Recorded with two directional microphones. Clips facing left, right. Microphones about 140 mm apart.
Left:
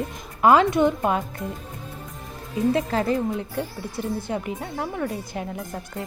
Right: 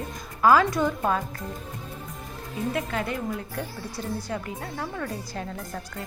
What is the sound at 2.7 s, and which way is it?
Speech, 35° left (ahead or behind).